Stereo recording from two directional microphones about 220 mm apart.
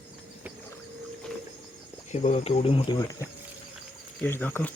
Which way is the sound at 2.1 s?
30° left (ahead or behind).